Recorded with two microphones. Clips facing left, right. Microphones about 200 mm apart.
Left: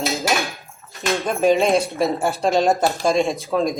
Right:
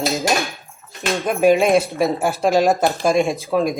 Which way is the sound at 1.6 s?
Centre (ahead or behind).